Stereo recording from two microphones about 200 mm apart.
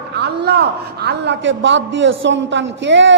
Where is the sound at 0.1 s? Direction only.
55° right (ahead or behind).